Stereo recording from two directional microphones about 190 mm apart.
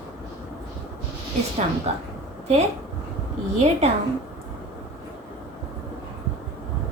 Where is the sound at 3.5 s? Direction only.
35° right (ahead or behind).